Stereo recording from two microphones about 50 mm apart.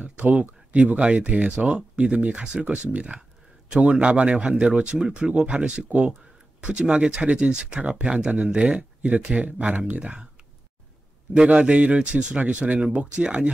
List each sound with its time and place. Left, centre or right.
0.0 s a sound: right
0.7 s speech: right
11.3 s speech: right